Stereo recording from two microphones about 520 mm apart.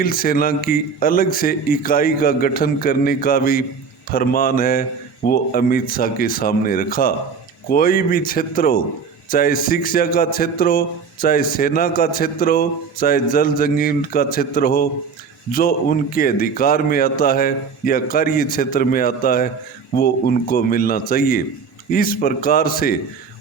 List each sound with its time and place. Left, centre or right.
0.0 s a man's voice: centre